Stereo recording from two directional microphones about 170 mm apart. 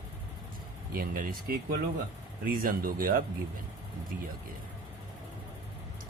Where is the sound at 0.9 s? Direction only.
55° right (ahead or behind).